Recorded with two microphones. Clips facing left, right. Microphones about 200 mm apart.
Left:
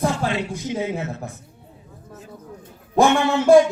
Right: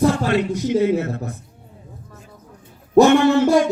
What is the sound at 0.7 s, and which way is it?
Speech, 55° right (ahead or behind).